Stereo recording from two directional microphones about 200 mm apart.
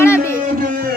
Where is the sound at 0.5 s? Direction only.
45° right (ahead or behind).